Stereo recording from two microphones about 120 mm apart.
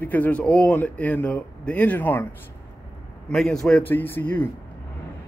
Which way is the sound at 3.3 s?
5° left (ahead or behind).